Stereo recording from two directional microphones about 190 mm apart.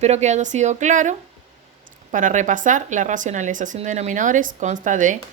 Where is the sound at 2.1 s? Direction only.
40° right (ahead or behind).